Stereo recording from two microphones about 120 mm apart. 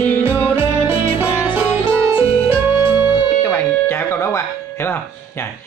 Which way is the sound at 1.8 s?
50° left (ahead or behind).